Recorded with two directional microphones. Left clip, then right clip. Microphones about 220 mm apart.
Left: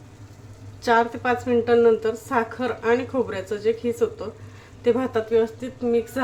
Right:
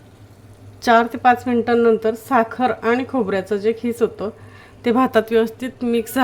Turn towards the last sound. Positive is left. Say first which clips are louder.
# right 2 dB
turn(degrees=-45)  # may be behind; listen again after turning